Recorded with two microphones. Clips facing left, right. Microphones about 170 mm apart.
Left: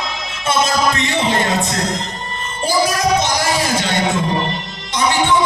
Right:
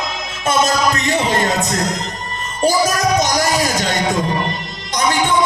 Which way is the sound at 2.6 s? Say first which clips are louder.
Right 2 dB; 45° right (ahead or behind).